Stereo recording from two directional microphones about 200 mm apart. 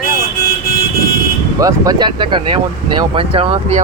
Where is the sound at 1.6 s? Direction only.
20° right (ahead or behind).